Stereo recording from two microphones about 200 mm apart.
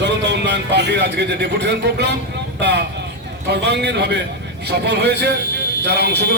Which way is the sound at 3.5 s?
55° right (ahead or behind).